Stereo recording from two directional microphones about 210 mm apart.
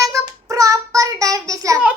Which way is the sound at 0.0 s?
15° right (ahead or behind).